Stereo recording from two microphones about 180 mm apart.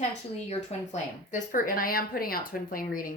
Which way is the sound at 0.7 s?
35° left (ahead or behind).